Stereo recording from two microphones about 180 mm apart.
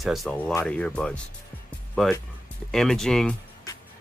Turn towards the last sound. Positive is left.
turn(degrees=5)  # may be behind; listen again after turning